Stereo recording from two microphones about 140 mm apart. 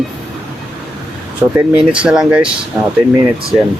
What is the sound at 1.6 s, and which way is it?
Speech, 5° right (ahead or behind).